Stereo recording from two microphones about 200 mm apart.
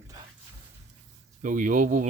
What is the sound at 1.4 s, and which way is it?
Speech, 40° right (ahead or behind).